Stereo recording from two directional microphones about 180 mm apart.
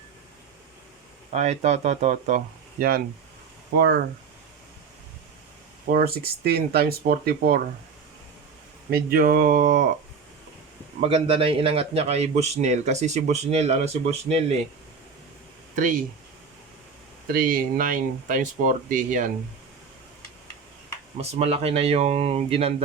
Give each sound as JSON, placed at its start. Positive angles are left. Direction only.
{"t": 1.3, "sound": "a man's voice", "side_deg": -40}
{"t": 3.8, "sound": "speech", "side_deg": -70}
{"t": 5.9, "sound": "speech", "side_deg": -55}
{"t": 8.9, "sound": "speech", "side_deg": -55}
{"t": 11.0, "sound": "a man's voice", "side_deg": -30}
{"t": 15.7, "sound": "speech", "side_deg": -45}
{"t": 17.2, "sound": "speech", "side_deg": -50}
{"t": 21.2, "sound": "a man's voice", "side_deg": -35}